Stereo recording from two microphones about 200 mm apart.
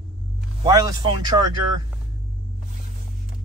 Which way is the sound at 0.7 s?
20° right (ahead or behind).